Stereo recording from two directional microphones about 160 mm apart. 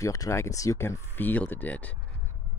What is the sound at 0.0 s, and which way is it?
Speech, 20° left (ahead or behind).